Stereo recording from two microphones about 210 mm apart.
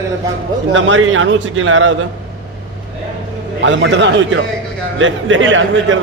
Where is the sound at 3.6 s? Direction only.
60° right (ahead or behind).